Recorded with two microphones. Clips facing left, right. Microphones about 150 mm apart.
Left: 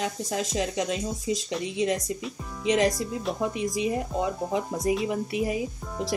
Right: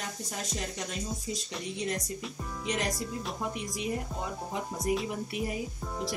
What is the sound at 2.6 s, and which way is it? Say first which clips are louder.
Speech: left 10 dB; 90° left.